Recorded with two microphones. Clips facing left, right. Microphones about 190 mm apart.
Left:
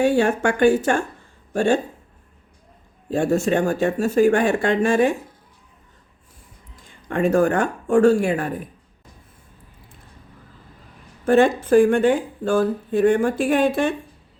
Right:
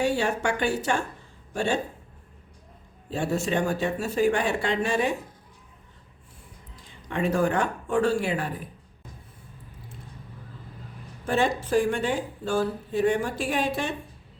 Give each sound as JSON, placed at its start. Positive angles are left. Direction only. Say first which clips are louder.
{"t": 0.0, "sound": "speech", "louder": "left 7 dB", "side_deg": 50}
{"t": 3.1, "sound": "speech", "louder": "left 7 dB", "side_deg": 45}
{"t": 6.7, "sound": "speech", "louder": "left 6 dB", "side_deg": 50}
{"t": 11.3, "sound": "speech", "louder": "left 9 dB", "side_deg": 55}